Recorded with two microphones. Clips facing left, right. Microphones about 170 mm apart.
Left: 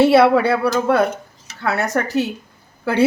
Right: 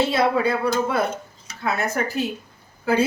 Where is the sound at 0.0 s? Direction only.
70° left (ahead or behind).